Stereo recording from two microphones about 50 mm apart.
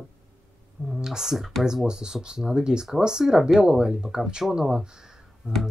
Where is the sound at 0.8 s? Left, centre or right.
Centre.